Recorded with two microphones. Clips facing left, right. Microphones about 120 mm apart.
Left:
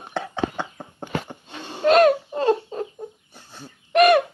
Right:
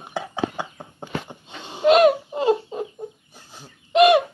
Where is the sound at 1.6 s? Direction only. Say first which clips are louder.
Right 1 dB; 15° right (ahead or behind).